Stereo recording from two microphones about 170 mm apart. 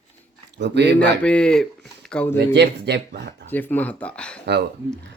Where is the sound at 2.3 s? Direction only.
90° right.